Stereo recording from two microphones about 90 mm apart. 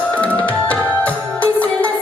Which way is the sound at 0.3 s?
15° left (ahead or behind).